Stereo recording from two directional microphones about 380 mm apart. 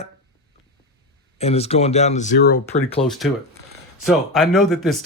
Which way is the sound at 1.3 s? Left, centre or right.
Centre.